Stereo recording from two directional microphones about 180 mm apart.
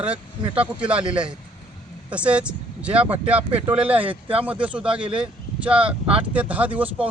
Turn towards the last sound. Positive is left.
turn(degrees=-10)  # may be behind; listen again after turning